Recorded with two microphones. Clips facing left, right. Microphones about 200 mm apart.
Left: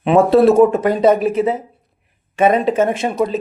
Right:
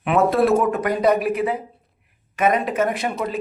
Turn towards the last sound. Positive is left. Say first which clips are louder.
# left 6 dB
turn(degrees=20)  # may be behind; listen again after turning